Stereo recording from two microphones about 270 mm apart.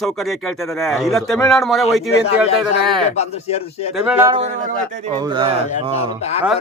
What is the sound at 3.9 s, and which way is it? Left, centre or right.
Speech, centre.